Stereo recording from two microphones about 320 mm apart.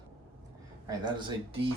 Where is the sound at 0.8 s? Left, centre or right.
Centre.